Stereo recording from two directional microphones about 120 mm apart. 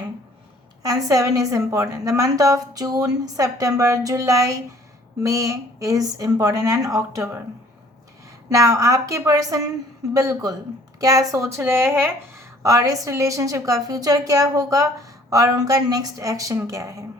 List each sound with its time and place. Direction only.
0.8 s a woman's voice: 30° right (ahead or behind)
8.4 s a woman's voice: 30° right (ahead or behind)